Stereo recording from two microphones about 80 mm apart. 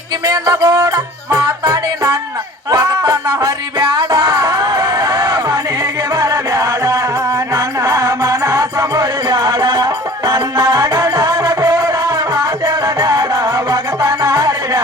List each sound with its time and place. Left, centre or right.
0.6 s music: right
13.4 s music: right